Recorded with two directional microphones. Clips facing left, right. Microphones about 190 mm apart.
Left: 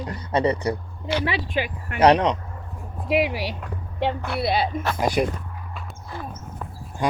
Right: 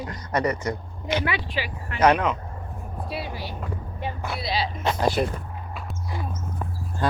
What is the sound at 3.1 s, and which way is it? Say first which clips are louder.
Speech: left 12 dB; 90° left.